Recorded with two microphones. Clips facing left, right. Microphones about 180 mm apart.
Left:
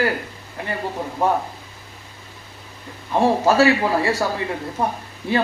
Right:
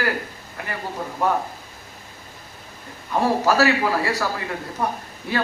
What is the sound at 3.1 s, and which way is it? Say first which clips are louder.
A man's voice: left 3 dB; 25° left (ahead or behind).